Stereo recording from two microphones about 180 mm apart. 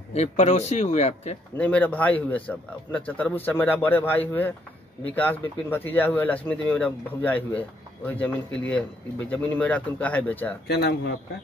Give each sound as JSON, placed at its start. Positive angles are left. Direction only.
{"t": 0.1, "sound": "a man's voice", "side_deg": 35}
{"t": 1.6, "sound": "speech", "side_deg": 10}
{"t": 10.7, "sound": "speech", "side_deg": 65}